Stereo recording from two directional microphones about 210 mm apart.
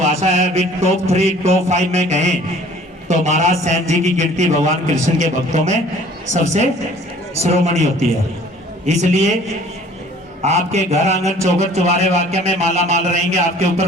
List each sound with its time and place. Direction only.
0.0 s a man's voice: 30° right (ahead or behind)
8.9 s a man's voice: 35° right (ahead or behind)
10.4 s a man's voice: 30° right (ahead or behind)